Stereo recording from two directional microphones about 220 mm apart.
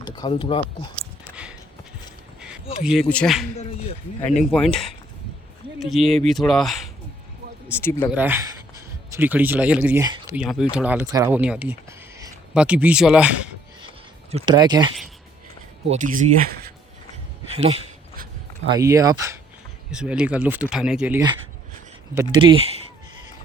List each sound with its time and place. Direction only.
0.0 s speech: 20° left (ahead or behind)
2.8 s speech: centre (ahead or behind)
7.7 s speech: 10° left (ahead or behind)
8.1 s speech: 10° right (ahead or behind)
14.3 s speech: 25° right (ahead or behind)
15.9 s speech: 35° right (ahead or behind)
17.5 s a sound: 30° right (ahead or behind)
18.7 s speech: 15° right (ahead or behind)
19.9 s speech: 5° right (ahead or behind)
22.1 s speech: 15° right (ahead or behind)